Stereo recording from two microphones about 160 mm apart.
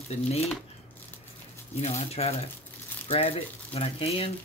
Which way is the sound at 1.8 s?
40° left (ahead or behind).